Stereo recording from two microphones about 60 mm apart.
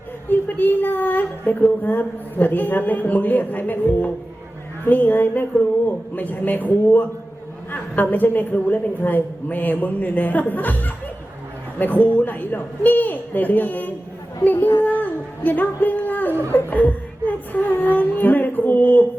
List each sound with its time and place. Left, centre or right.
0.3 s a woman's voice: left
14.4 s a sound: left
17.9 s music: left